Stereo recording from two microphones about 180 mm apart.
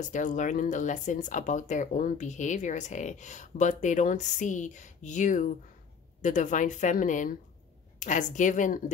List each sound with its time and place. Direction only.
0.0 s speech: 45° left (ahead or behind)